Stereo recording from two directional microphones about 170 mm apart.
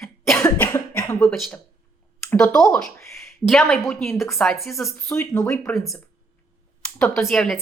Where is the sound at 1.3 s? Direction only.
Centre (ahead or behind).